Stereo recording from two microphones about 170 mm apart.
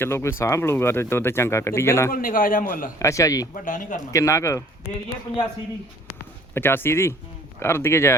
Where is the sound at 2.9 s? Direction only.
20° left (ahead or behind).